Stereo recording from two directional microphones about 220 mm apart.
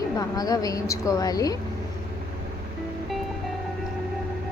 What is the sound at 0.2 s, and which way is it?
A woman's voice, 15° left (ahead or behind).